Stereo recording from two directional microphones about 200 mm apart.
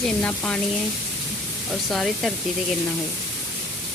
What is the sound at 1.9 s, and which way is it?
Speech, centre (ahead or behind).